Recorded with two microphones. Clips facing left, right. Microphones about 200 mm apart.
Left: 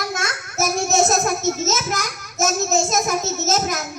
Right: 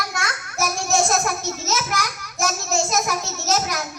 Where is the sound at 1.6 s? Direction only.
45° left (ahead or behind).